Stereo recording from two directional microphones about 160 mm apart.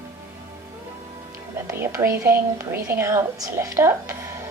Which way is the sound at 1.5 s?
15° right (ahead or behind).